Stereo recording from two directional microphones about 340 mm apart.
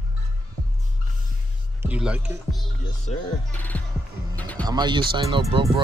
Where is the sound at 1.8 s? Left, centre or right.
Centre.